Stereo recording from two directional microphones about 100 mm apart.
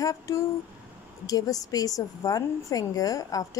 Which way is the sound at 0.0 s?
30° left (ahead or behind).